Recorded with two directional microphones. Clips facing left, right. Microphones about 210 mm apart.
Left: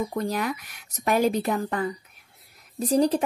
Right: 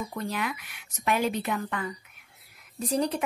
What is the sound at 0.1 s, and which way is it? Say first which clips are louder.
Speech: left 5 dB; 40° left (ahead or behind).